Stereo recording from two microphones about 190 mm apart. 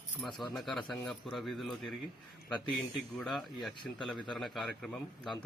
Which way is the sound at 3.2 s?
Centre (ahead or behind).